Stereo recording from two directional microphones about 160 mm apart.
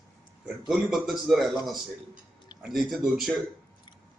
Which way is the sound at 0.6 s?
5° right (ahead or behind).